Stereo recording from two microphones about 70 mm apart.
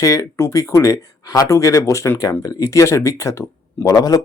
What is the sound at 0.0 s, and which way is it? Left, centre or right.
Speech, left.